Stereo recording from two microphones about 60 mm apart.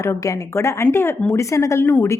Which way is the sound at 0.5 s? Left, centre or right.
Left.